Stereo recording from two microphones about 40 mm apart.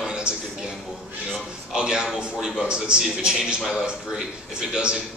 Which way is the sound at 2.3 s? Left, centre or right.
Centre.